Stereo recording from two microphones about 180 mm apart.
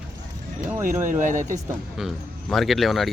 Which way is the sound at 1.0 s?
45° right (ahead or behind).